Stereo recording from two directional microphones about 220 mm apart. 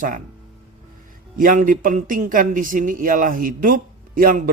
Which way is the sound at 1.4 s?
40° right (ahead or behind).